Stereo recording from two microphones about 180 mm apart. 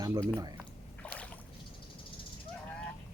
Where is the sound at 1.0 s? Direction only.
5° left (ahead or behind).